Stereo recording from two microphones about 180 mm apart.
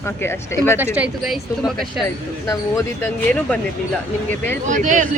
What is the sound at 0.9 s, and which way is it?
Speech, 5° right (ahead or behind).